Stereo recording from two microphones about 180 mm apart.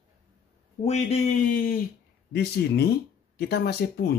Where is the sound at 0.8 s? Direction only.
40° left (ahead or behind).